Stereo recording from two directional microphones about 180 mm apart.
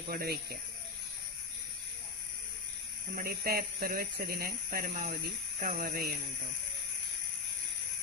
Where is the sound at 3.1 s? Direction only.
55° right (ahead or behind).